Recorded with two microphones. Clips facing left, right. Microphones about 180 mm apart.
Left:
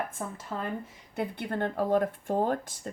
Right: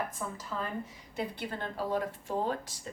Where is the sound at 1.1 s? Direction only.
55° left (ahead or behind).